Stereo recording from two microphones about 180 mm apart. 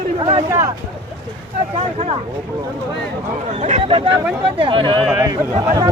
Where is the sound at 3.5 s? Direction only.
40° right (ahead or behind).